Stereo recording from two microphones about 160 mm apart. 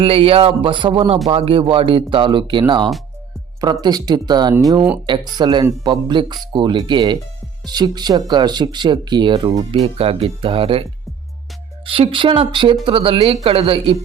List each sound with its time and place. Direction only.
0.0 s speech: 35° right (ahead or behind)
11.9 s speech: 35° right (ahead or behind)